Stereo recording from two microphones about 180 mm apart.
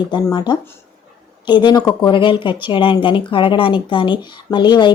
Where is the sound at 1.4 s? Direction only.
25° left (ahead or behind).